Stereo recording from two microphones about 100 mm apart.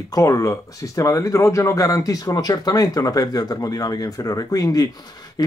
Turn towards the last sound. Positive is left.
turn(degrees=40)  # may be behind; listen again after turning